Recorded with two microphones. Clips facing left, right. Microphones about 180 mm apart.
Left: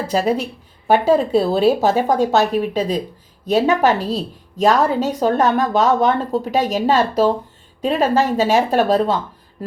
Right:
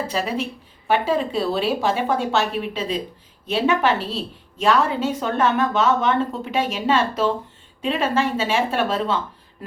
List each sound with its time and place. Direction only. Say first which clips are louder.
0.1 s a woman's voice: left 6 dB; 40° left (ahead or behind)